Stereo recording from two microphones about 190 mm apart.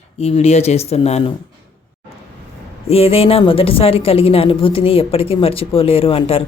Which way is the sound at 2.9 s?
30° left (ahead or behind).